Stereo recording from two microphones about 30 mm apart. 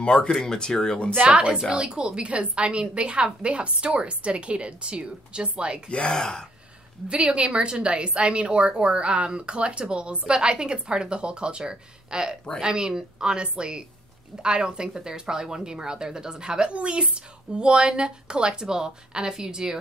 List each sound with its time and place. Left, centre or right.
0.0 s speech: left
0.4 s speech: left
1.1 s a woman's voice: right
1.7 s a woman's voice: right
5.9 s speech: left
6.1 s speech: left
7.2 s a woman's voice: right